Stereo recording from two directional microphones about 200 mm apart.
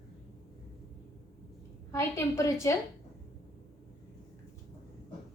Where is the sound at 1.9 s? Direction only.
15° left (ahead or behind).